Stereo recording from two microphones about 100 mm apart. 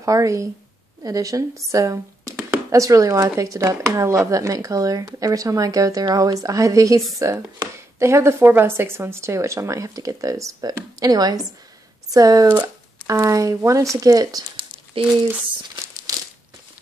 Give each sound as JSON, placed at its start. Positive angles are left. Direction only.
{"t": 0.0, "sound": "speech", "side_deg": -35}
{"t": 15.0, "sound": "speech", "side_deg": -65}